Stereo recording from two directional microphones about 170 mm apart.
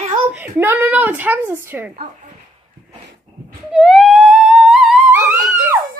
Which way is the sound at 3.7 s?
Centre (ahead or behind).